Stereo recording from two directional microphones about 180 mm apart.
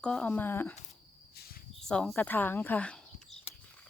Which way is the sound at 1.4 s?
55° left (ahead or behind).